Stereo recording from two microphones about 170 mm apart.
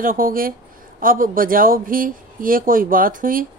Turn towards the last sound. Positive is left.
turn(degrees=-55)  # may be behind; listen again after turning